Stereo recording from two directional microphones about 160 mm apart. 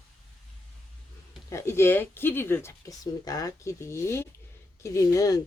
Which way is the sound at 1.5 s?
15° left (ahead or behind).